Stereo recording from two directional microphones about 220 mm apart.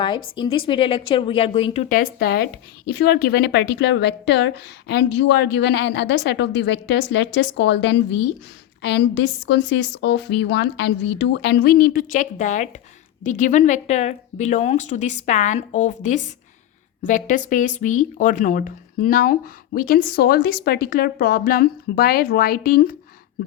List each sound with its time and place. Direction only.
0.5 s a woman's voice: 25° left (ahead or behind); by 23.0 s 40° left (ahead or behind)